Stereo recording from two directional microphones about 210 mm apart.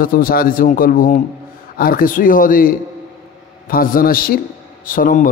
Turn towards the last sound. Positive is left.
turn(degrees=40)  # may be behind; listen again after turning